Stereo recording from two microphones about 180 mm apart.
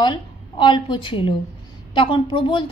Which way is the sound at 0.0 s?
25° left (ahead or behind).